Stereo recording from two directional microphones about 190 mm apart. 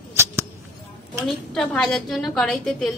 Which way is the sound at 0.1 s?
15° right (ahead or behind).